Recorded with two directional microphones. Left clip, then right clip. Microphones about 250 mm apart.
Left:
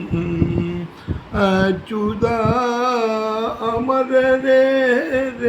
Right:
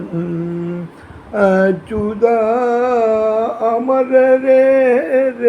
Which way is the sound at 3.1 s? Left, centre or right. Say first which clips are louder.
Right 6 dB; left.